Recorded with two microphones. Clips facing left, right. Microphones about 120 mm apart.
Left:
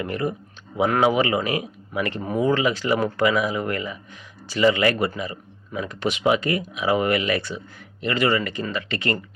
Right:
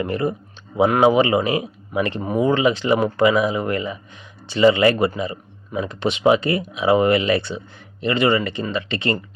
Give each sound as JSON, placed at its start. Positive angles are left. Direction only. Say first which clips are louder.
{"t": 0.0, "sound": "speech", "louder": "right 4 dB", "side_deg": -30}